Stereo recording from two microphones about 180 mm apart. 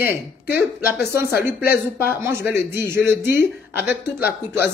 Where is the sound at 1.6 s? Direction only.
55° left (ahead or behind).